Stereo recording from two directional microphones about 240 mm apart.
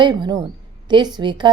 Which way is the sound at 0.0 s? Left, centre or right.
Centre.